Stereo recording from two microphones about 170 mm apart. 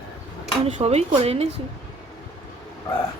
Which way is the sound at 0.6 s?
40° right (ahead or behind).